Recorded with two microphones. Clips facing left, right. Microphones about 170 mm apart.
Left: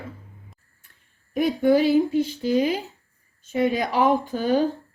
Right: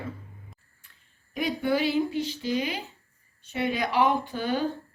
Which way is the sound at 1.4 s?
45° left (ahead or behind).